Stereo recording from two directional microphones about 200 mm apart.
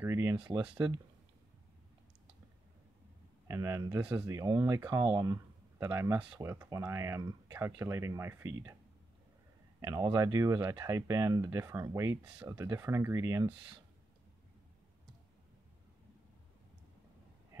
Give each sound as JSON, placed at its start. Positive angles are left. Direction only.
{"t": 0.0, "sound": "speech", "side_deg": -15}
{"t": 3.4, "sound": "speech", "side_deg": -15}
{"t": 9.8, "sound": "speech", "side_deg": -15}